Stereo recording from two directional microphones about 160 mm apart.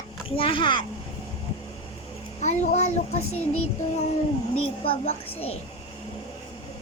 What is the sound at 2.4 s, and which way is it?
Speech, 45° left (ahead or behind).